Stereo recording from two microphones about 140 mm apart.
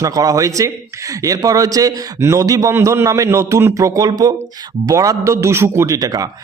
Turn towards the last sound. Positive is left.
turn(degrees=-25)  # may be behind; listen again after turning